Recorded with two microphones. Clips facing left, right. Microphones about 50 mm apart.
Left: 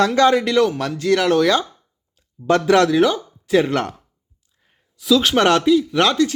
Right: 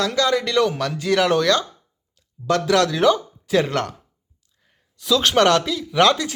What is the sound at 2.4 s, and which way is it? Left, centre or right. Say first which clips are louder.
Speech: left 3 dB; left.